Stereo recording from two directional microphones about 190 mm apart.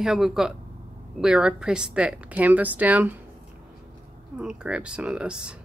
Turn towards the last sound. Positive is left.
turn(degrees=-5)  # may be behind; listen again after turning